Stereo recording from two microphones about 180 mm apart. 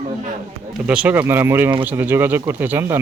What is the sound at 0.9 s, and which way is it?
Speech, 5° right (ahead or behind).